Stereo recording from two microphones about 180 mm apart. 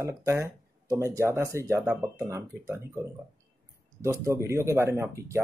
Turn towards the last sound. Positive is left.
turn(degrees=-15)  # may be behind; listen again after turning